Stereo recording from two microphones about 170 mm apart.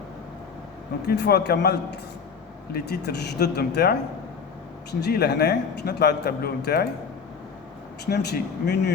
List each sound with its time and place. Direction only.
1.0 s a man's voice: 75° left (ahead or behind)
4.9 s a man's voice: 75° left (ahead or behind)
8.0 s speech: 80° left